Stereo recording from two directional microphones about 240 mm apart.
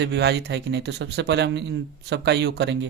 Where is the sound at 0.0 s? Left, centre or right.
Right.